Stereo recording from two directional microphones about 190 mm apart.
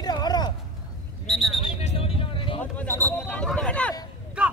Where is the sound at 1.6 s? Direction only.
30° left (ahead or behind).